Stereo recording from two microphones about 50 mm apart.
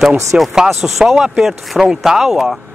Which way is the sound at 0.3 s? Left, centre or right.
Right.